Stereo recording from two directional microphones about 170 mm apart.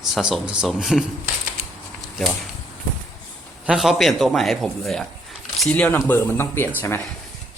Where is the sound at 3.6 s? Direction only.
Centre (ahead or behind); by 6.7 s 15° left (ahead or behind).